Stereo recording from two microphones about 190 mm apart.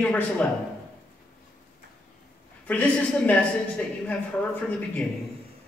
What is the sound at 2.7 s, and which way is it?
Speech, 5° left (ahead or behind).